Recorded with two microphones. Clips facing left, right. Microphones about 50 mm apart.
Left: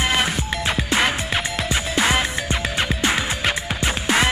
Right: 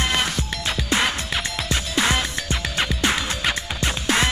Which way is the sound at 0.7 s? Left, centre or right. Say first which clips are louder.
Left 1 dB; centre.